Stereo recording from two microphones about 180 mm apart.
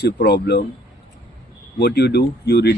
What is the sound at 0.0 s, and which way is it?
Speech, 65° left (ahead or behind).